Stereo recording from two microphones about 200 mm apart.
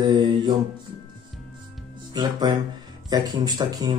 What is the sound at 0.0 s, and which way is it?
Mantra, 20° right (ahead or behind).